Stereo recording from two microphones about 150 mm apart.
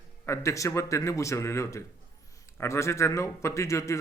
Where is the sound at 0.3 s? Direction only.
20° left (ahead or behind).